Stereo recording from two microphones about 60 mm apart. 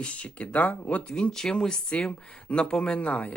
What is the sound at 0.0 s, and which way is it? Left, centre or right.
Speech, left.